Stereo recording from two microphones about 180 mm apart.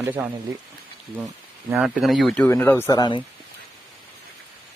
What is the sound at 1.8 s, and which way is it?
Speech, centre (ahead or behind).